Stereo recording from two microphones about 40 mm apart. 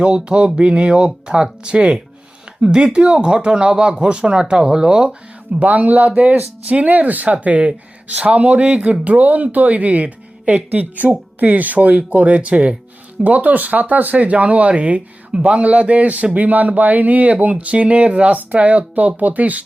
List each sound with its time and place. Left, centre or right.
0.0 s speech: right
5.5 s speech: right
13.2 s speech: right